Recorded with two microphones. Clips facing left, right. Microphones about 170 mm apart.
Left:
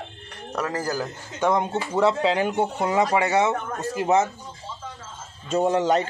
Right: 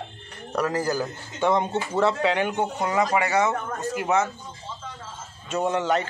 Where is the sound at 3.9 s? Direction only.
35° left (ahead or behind).